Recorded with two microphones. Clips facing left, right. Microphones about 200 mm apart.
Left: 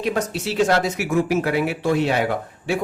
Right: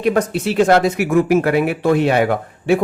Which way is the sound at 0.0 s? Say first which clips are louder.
Right 6 dB; 55° right (ahead or behind).